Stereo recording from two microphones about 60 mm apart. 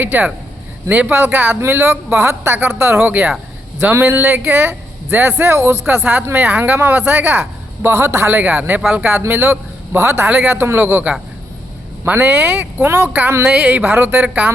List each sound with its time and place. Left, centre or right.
0.0 s a woman's voice: right
0.9 s speech: right
1.1 s a woman's voice: right
3.9 s a woman's voice: right
7.9 s a man's voice: right
8.4 s a man's voice: right
10.2 s a woman's voice: right
12.1 s a woman's voice: right
13.5 s speech: right
13.9 s a woman's voice: right